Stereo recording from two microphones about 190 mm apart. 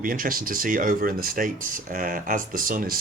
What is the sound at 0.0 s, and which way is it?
Speech, 45° right (ahead or behind).